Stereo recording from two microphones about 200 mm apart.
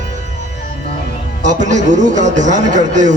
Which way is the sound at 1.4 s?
35° right (ahead or behind).